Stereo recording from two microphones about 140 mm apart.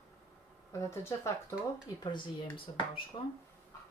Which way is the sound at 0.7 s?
20° left (ahead or behind).